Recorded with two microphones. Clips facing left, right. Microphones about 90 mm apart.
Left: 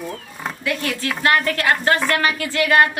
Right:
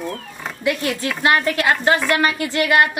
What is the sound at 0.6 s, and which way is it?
Speech, 20° right (ahead or behind).